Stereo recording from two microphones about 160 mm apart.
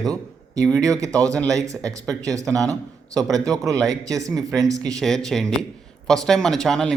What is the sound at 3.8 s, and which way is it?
Speech, 20° right (ahead or behind).